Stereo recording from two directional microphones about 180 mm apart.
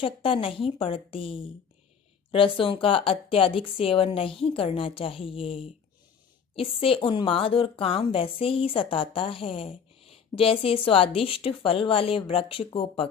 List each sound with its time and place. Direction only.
0.0 s a woman's voice: 30° left (ahead or behind)